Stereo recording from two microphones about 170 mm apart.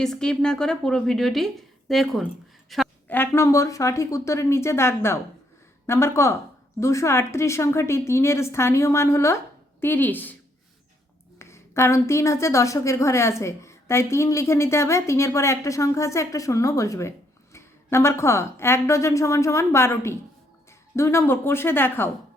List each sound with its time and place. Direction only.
0.0 s a woman's voice: 5° left (ahead or behind)
3.1 s a woman's voice: 15° left (ahead or behind)
11.3 s a woman's voice: 15° left (ahead or behind)